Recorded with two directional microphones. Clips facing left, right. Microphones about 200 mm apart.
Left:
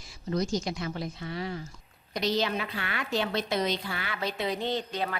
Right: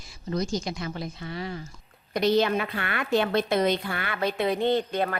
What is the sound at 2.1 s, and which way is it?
Speech, 55° right (ahead or behind).